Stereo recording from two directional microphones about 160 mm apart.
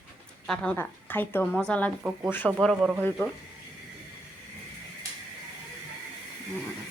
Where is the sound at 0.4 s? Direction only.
5° left (ahead or behind).